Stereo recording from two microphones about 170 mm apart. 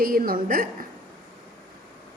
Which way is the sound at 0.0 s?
60° right (ahead or behind).